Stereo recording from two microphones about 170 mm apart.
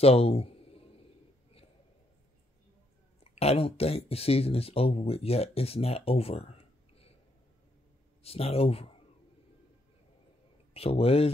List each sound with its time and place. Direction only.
0.0 s a sound: 35° left (ahead or behind)
3.3 s speech: 35° left (ahead or behind)
8.2 s speech: 35° left (ahead or behind)
10.7 s speech: 35° left (ahead or behind)